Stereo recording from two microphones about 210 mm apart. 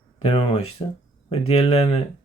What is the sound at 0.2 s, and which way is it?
Speech, 25° left (ahead or behind).